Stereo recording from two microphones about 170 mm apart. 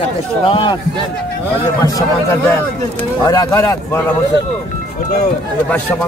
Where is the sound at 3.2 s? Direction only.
20° left (ahead or behind).